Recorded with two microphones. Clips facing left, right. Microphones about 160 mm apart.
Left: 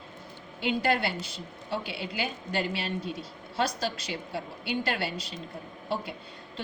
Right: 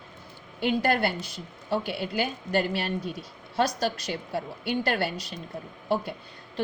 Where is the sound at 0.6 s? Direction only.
45° right (ahead or behind).